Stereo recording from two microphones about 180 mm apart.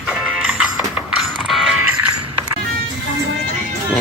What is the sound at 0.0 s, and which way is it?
Music, 5° right (ahead or behind).